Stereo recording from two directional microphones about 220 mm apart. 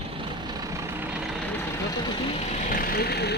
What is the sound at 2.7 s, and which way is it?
Speech, 40° left (ahead or behind).